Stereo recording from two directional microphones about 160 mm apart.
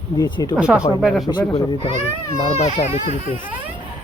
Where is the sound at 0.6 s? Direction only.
5° right (ahead or behind).